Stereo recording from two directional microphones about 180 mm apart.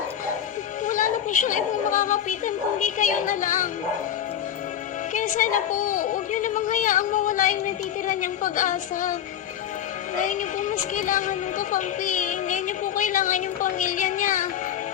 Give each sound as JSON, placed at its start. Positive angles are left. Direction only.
{"t": 0.9, "sound": "a woman's voice", "side_deg": 45}
{"t": 5.1, "sound": "a woman's voice", "side_deg": 45}
{"t": 10.2, "sound": "music", "side_deg": 45}